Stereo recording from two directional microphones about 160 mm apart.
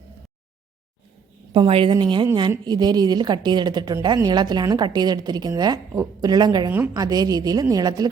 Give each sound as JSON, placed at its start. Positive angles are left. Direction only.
{"t": 1.5, "sound": "a woman's voice", "side_deg": -30}